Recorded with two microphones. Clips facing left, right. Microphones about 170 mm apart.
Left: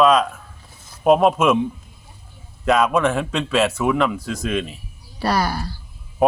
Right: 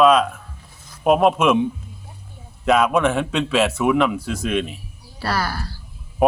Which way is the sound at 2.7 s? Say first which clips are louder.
Even; centre (ahead or behind).